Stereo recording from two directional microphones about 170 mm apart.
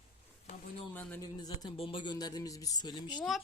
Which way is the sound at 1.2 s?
25° left (ahead or behind).